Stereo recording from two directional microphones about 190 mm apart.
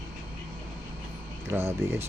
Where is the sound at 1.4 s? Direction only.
10° right (ahead or behind).